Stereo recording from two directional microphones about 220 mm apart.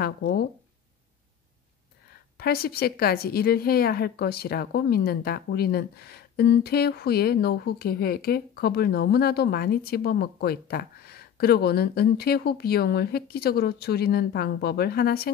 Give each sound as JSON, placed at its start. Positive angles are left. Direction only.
{"t": 0.0, "sound": "a woman's voice", "side_deg": 45}
{"t": 2.3, "sound": "a woman's voice", "side_deg": 45}